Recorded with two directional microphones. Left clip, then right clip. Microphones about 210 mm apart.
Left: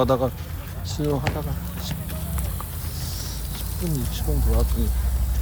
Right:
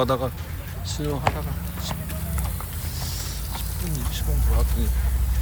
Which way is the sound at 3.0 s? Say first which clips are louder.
Right 1 dB; 25° left (ahead or behind).